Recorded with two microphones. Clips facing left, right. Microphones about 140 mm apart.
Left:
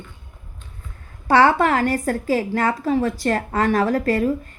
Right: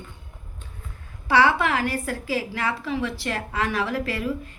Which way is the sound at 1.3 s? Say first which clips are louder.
Left 5 dB; 45° left (ahead or behind).